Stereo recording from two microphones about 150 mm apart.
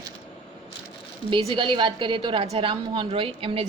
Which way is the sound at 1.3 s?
35° right (ahead or behind).